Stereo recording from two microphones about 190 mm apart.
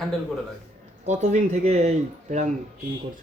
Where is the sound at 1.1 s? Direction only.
35° right (ahead or behind).